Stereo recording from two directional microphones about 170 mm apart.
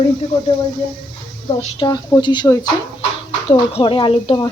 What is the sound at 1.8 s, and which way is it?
A woman's voice, 25° left (ahead or behind).